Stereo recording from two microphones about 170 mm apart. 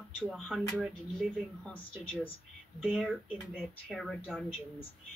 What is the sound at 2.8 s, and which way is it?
Speech, 5° right (ahead or behind).